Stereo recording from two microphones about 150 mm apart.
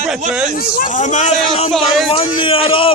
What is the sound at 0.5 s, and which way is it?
A man's voice, 65° left (ahead or behind).